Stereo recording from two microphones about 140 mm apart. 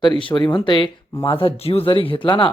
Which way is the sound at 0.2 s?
35° left (ahead or behind).